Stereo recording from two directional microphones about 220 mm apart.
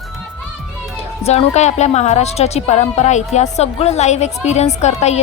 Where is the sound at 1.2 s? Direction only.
30° left (ahead or behind).